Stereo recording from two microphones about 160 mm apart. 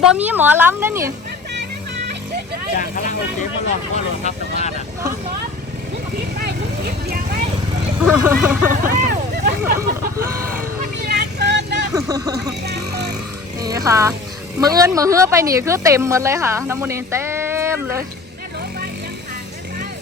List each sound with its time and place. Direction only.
0.0 s speech: 5° right (ahead or behind)
2.7 s speech: 60° left (ahead or behind)
3.9 s speech: 45° left (ahead or behind)
6.4 s vehicle: 80° right
8.0 s speech: 10° right (ahead or behind)
8.8 s speech: 75° right (ahead or behind)
10.5 s vehicle: 65° right (ahead or behind); by 11.9 s 90° right
11.9 s speech: 20° right (ahead or behind)
12.6 s music: 85° right
13.6 s speech: 20° right (ahead or behind)